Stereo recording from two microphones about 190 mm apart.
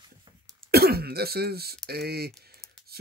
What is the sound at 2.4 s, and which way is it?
Typing, 55° right (ahead or behind).